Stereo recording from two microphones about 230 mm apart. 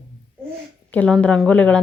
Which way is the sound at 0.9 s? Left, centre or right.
Centre.